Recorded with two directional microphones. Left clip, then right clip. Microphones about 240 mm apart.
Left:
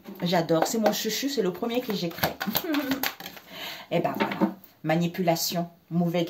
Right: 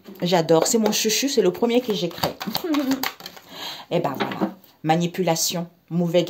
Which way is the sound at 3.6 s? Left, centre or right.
Right.